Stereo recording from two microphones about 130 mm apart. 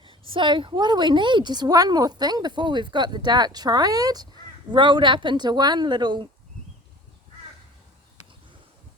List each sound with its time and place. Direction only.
0.0 s a woman's voice: 40° right (ahead or behind)